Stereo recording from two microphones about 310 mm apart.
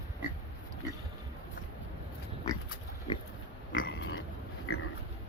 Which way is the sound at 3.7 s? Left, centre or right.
Left.